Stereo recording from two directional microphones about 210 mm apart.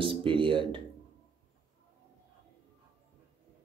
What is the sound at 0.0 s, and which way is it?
Speech, 25° right (ahead or behind).